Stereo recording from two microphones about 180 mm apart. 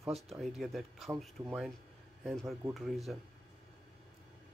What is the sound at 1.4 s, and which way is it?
Speech, 15° right (ahead or behind).